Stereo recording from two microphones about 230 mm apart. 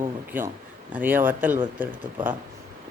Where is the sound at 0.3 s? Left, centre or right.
Centre.